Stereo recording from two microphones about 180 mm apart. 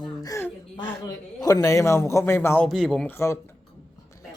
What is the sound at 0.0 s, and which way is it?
A woman's voice, 20° left (ahead or behind).